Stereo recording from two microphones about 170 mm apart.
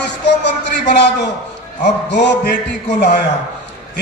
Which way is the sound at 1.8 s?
85° left.